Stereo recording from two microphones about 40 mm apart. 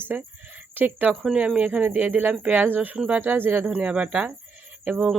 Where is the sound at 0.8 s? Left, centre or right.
Right.